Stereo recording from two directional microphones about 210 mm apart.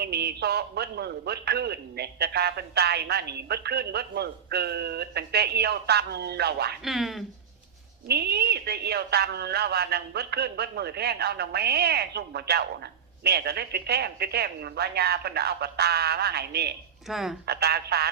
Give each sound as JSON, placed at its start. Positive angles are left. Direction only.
{"t": 0.0, "sound": "a man's voice", "side_deg": -50}
{"t": 6.8, "sound": "speech", "side_deg": 0}
{"t": 8.0, "sound": "a man's voice", "side_deg": -50}
{"t": 17.1, "sound": "speech", "side_deg": 0}
{"t": 17.4, "sound": "a man's voice", "side_deg": -50}